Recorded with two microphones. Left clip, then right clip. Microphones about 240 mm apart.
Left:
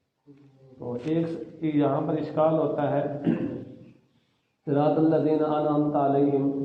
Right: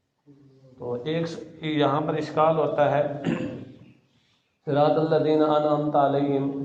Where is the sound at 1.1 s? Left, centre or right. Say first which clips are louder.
Left 1 dB; right.